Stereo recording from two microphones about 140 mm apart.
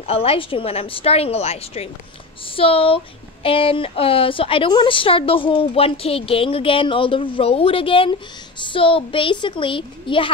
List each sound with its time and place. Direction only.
0.0 s a woman's voice: 45° left (ahead or behind)